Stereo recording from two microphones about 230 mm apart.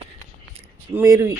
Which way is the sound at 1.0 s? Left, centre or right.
Centre.